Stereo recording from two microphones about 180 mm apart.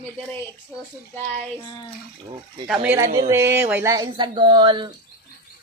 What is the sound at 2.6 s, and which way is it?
Speech, 5° right (ahead or behind).